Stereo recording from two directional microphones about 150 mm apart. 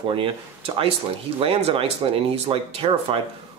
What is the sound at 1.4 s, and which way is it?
Speech, 40° right (ahead or behind).